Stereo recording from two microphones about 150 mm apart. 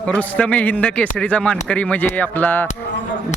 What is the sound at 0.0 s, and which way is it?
A man's voice, 10° left (ahead or behind).